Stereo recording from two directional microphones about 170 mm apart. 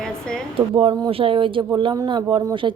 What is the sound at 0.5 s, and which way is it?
Speech, 30° right (ahead or behind).